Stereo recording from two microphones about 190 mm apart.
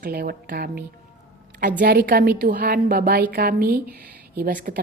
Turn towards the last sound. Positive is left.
turn(degrees=-45)  # may be behind; listen again after turning